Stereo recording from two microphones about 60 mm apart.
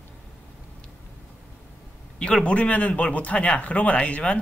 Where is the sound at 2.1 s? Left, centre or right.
Centre.